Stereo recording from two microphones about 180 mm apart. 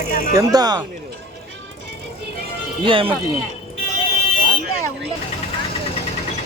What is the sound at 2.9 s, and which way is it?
Speech, 30° right (ahead or behind).